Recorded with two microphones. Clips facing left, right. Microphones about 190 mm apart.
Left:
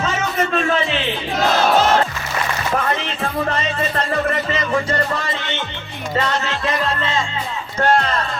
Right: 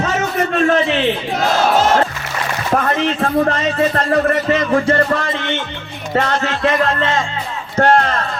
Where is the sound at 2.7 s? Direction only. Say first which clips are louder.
Right 8 dB; 55° right (ahead or behind).